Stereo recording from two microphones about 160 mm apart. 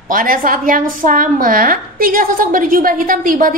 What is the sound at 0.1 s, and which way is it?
A woman's voice, 60° right (ahead or behind).